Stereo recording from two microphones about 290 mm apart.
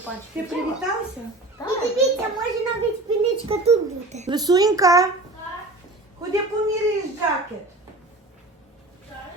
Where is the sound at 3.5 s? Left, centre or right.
Right.